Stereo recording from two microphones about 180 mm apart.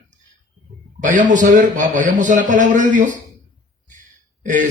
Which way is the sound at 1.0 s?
45° right (ahead or behind).